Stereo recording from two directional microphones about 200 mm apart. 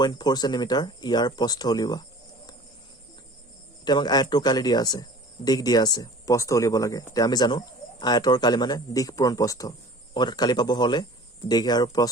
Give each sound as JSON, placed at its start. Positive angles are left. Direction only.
{"t": 0.0, "sound": "speech", "side_deg": 20}
{"t": 3.8, "sound": "speech", "side_deg": 20}